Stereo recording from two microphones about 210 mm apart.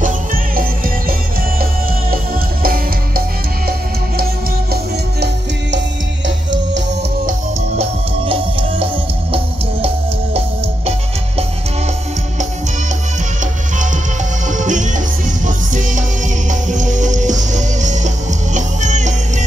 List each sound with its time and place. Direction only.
0.0 s music: 40° right (ahead or behind)
6.2 s music: 60° right (ahead or behind)
7.2 s music: 30° right (ahead or behind)
14.5 s music: 35° right (ahead or behind)